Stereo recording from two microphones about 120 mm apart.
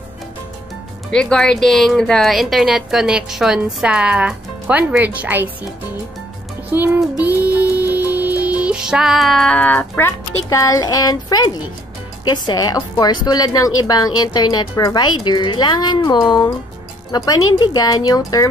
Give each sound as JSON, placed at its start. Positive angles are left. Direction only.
{"t": 1.1, "sound": "a woman's voice", "side_deg": 5}
{"t": 6.7, "sound": "music", "side_deg": -15}
{"t": 12.3, "sound": "a woman's voice", "side_deg": 35}